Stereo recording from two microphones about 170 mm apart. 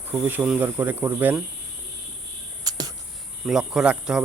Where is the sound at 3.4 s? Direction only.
5° right (ahead or behind).